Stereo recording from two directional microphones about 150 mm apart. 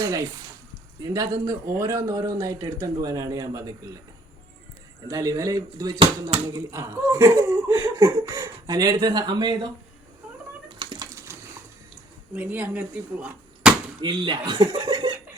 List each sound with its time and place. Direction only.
0.0 s speech: 20° right (ahead or behind)
5.0 s speech: 20° right (ahead or behind)
10.7 s cat: 30° right (ahead or behind)
11.3 s a sound: 15° right (ahead or behind)
12.3 s speech: 10° right (ahead or behind)
14.0 s speech: 30° right (ahead or behind)